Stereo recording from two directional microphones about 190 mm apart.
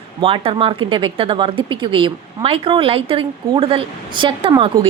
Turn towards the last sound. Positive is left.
turn(degrees=-25)  # may be behind; listen again after turning